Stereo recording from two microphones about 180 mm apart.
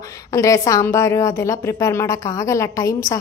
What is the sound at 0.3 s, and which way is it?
A woman's voice, 15° left (ahead or behind).